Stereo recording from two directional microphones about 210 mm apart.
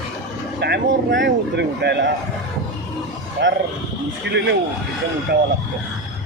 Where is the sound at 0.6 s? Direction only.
55° right (ahead or behind).